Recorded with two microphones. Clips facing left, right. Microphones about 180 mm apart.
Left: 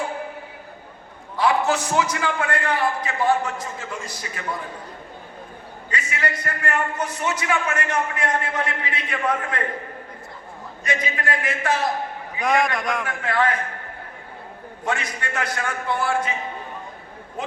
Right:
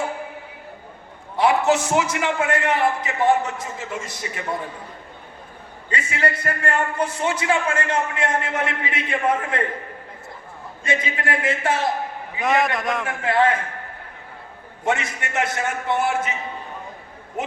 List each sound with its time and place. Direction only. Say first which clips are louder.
1.4 s a man's voice: right 2 dB; 25° right (ahead or behind)
5.9 s a man's voice: right 3 dB; 30° right (ahead or behind)
10.8 s a man's voice: right 1 dB; 25° right (ahead or behind)
12.4 s a man's voice: even; 5° right (ahead or behind)
13.1 s a man's voice: right 5 dB; 25° right (ahead or behind)
14.8 s a man's voice: right 3 dB; 25° right (ahead or behind)